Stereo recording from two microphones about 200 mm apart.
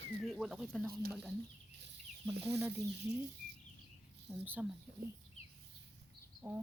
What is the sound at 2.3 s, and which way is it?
Speech, 55° right (ahead or behind).